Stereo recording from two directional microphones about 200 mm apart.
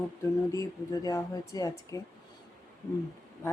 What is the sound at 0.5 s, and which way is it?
Speech, 15° left (ahead or behind).